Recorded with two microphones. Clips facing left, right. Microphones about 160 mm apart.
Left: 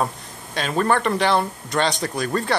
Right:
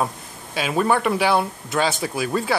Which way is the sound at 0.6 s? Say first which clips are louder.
Even; 5° right (ahead or behind).